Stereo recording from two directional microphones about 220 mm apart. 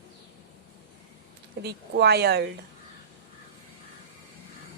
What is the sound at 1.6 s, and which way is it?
Speech, 50° right (ahead or behind).